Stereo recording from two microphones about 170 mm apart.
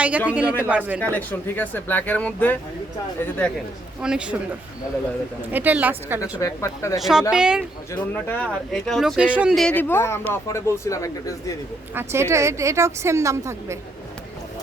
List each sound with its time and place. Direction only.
0.3 s a woman's voice: 10° right (ahead or behind)
1.0 s speech: 10° left (ahead or behind)
4.0 s speech: 5° right (ahead or behind)
5.5 s a woman's voice: 10° right (ahead or behind)
6.4 s speech: 20° left (ahead or behind)
7.0 s speech: 5° right (ahead or behind)
7.9 s speech: 10° left (ahead or behind)
11.9 s a woman's voice: 15° right (ahead or behind)